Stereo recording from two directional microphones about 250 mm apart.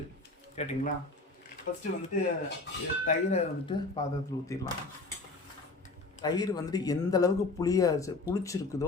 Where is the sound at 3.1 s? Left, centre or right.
Left.